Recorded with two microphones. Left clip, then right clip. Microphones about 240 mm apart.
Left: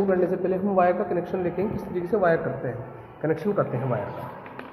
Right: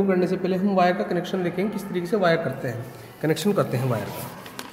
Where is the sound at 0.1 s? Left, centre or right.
Right.